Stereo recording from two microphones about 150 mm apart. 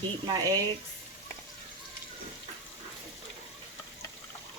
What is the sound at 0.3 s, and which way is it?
Speech, 25° right (ahead or behind).